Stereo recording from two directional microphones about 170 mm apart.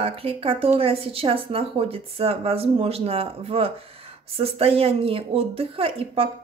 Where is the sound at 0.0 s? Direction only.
35° right (ahead or behind).